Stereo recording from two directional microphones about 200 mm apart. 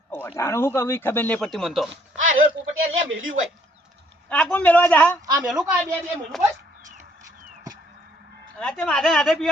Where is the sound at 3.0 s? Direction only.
75° right (ahead or behind).